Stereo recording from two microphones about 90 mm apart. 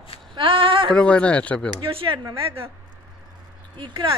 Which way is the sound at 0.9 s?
10° left (ahead or behind).